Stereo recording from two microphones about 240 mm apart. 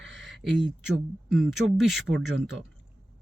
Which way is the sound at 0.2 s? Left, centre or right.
Centre.